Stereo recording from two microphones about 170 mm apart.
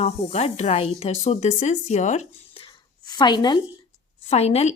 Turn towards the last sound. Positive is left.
turn(degrees=40)  # may be behind; listen again after turning